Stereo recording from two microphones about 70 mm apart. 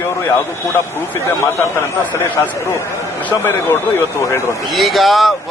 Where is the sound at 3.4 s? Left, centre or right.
Left.